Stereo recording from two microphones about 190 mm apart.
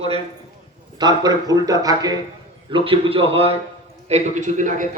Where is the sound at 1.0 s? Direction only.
20° right (ahead or behind).